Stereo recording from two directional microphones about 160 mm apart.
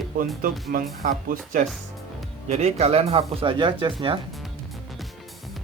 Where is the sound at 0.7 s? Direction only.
60° right (ahead or behind).